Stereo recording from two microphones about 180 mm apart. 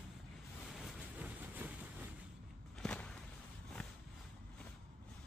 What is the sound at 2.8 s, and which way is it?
Walk, 5° left (ahead or behind).